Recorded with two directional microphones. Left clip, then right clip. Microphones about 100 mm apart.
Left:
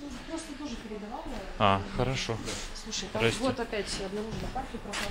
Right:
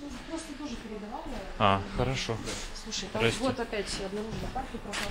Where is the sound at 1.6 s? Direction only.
10° left (ahead or behind).